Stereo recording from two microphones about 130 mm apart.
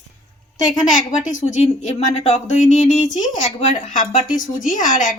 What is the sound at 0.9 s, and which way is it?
A woman's voice, 75° left (ahead or behind).